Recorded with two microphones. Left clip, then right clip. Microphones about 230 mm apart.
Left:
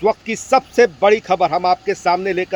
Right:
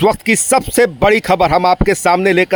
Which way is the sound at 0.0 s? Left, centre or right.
Right.